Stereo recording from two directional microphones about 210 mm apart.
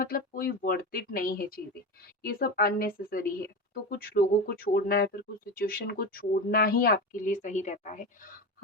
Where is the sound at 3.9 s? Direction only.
45° left (ahead or behind).